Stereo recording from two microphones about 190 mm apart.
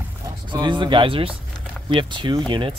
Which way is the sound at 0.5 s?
25° right (ahead or behind).